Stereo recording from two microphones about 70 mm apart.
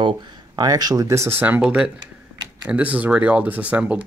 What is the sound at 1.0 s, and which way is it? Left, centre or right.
Speech, right.